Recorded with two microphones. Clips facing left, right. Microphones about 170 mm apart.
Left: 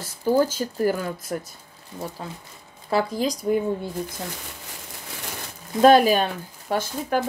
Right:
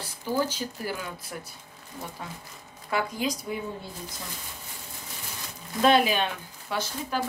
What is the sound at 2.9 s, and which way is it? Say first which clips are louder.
Speech: left 5 dB; 35° left (ahead or behind).